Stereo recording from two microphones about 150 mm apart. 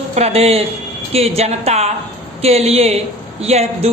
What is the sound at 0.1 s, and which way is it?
A man's voice, 45° right (ahead or behind).